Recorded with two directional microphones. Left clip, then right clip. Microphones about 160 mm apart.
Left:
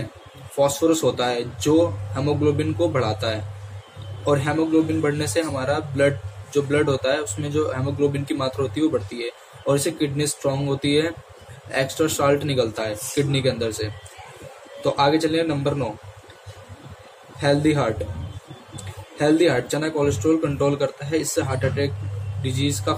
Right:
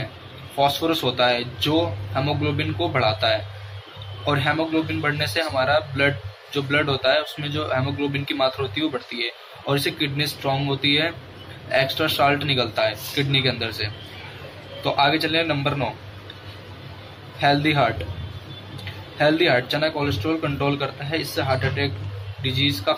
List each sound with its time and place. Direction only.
0.6 s a man's voice: 15° left (ahead or behind)
15.0 s a man's voice: 15° left (ahead or behind)
17.4 s a man's voice: 10° left (ahead or behind)
19.1 s a man's voice: 15° left (ahead or behind)